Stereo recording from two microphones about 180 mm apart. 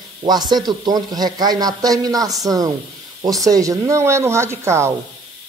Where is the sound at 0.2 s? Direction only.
20° right (ahead or behind).